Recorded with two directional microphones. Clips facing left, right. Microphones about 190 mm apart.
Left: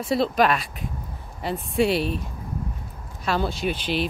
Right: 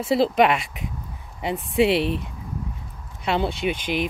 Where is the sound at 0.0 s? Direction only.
25° right (ahead or behind).